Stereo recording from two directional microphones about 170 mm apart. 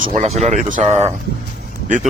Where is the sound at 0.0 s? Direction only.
45° right (ahead or behind).